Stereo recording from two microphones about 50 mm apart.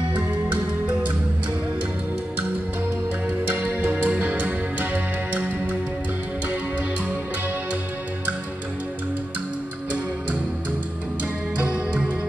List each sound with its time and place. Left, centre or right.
0.3 s music: right
3.4 s music: right
11.5 s music: right